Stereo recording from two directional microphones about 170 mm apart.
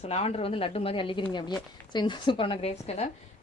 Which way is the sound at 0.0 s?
35° left (ahead or behind).